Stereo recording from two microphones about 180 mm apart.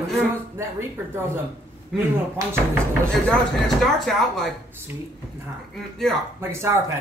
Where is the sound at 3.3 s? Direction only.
Centre (ahead or behind).